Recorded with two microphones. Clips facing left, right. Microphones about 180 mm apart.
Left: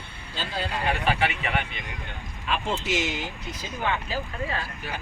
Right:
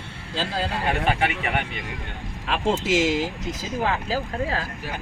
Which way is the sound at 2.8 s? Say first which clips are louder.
Right 7 dB; 90° right.